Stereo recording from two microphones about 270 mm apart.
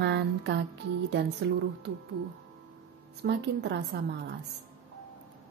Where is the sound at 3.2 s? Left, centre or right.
Right.